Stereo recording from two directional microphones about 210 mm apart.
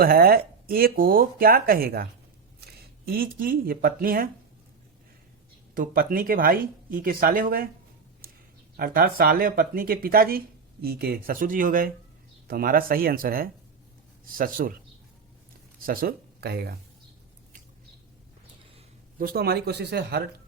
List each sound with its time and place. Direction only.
0.0 s speech: 45° right (ahead or behind)
3.1 s speech: 45° right (ahead or behind)
5.7 s speech: 45° right (ahead or behind)
8.7 s speech: 45° right (ahead or behind)
15.9 s speech: 45° right (ahead or behind)
19.2 s speech: 45° right (ahead or behind)